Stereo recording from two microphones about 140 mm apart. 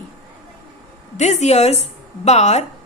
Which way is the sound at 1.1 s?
55° left (ahead or behind).